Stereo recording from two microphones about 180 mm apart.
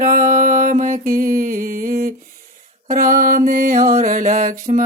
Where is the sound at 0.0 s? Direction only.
50° right (ahead or behind).